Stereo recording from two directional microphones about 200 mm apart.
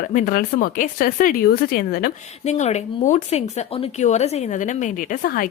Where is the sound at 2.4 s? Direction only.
35° left (ahead or behind).